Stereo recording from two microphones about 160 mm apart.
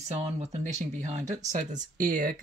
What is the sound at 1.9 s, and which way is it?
Speech, 60° right (ahead or behind).